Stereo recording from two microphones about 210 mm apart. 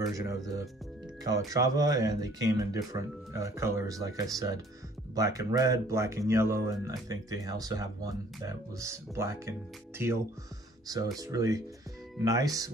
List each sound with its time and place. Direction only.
0.1 s speech: 15° right (ahead or behind)